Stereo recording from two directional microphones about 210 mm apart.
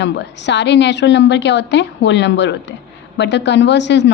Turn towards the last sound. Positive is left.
turn(degrees=55)  # may be behind; listen again after turning